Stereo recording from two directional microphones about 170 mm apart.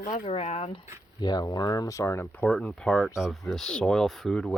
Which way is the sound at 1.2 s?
25° left (ahead or behind).